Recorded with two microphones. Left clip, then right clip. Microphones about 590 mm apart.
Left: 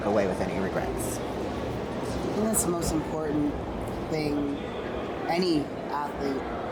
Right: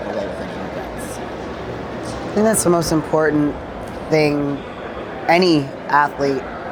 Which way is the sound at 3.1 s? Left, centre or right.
Right.